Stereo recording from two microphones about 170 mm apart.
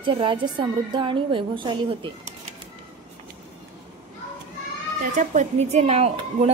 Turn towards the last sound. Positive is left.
turn(degrees=-40)  # may be behind; listen again after turning